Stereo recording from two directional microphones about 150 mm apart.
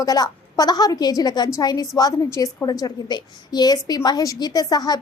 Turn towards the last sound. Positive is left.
turn(degrees=25)  # may be behind; listen again after turning